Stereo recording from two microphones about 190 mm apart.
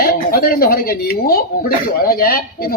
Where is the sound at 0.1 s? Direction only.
50° left (ahead or behind).